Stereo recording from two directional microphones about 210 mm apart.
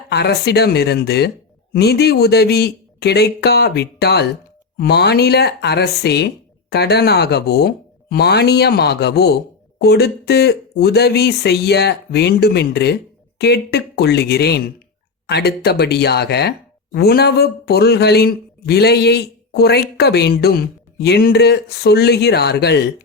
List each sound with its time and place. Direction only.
0.1 s speech: 50° left (ahead or behind)